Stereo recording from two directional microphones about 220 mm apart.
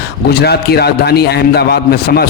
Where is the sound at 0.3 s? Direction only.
45° left (ahead or behind).